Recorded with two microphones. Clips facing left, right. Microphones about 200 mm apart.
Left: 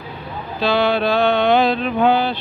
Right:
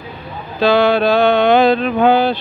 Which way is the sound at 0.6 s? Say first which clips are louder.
Right 5 dB; 45° right (ahead or behind).